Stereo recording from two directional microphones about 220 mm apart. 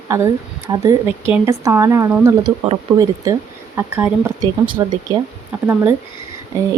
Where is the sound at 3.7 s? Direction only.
10° right (ahead or behind).